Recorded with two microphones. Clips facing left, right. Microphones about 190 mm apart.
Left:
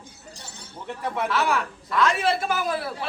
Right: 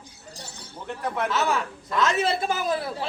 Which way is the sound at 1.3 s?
20° right (ahead or behind).